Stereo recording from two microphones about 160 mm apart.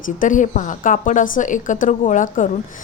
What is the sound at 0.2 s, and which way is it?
A woman's voice, 55° left (ahead or behind).